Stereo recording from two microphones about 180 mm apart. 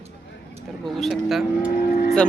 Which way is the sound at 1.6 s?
40° left (ahead or behind).